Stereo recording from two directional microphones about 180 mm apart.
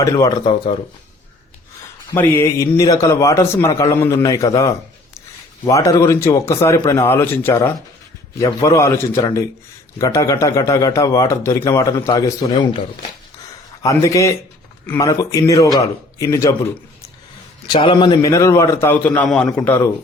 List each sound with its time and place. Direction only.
0.0 s speech: 20° left (ahead or behind)
2.1 s a man's voice: 15° left (ahead or behind)
12.0 s speech: 30° left (ahead or behind)
13.8 s a man's voice: 20° left (ahead or behind)
17.7 s a man's voice: 30° left (ahead or behind); by 19.9 s 10° left (ahead or behind)